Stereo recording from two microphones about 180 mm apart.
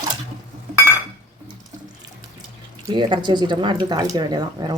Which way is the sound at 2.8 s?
25° right (ahead or behind).